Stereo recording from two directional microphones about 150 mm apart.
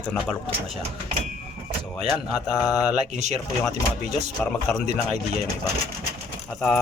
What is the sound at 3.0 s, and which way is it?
Speech, 50° right (ahead or behind).